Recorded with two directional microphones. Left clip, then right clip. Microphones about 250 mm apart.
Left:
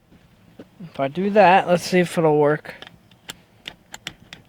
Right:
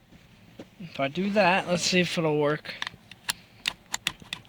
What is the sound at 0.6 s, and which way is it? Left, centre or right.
Speech, left.